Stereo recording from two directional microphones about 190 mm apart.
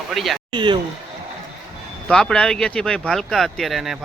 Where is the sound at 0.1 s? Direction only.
Centre (ahead or behind).